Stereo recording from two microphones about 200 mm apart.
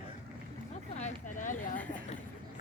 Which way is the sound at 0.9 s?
35° left (ahead or behind).